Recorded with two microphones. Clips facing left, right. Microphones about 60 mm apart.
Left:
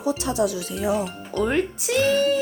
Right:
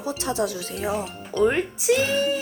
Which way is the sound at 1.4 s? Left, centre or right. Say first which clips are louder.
Right 4 dB; centre.